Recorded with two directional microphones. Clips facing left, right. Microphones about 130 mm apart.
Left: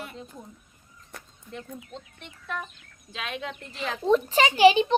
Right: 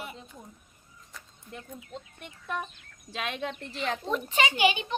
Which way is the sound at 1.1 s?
65° left (ahead or behind).